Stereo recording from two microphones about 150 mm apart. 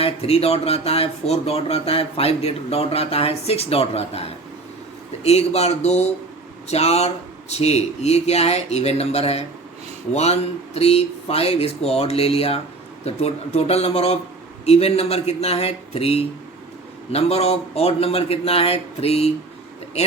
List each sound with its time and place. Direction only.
0.0 s speech: 45° left (ahead or behind)
10.8 s speech: 40° left (ahead or behind)